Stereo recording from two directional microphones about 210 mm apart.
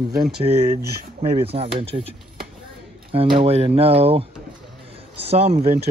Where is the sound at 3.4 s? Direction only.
30° right (ahead or behind).